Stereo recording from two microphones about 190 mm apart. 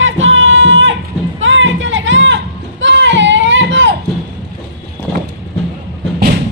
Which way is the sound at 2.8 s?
75° right (ahead or behind).